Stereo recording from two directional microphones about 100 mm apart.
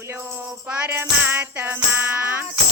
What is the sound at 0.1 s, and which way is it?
Music, 25° right (ahead or behind).